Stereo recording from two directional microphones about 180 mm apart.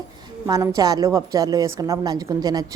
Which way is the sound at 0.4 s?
20° right (ahead or behind).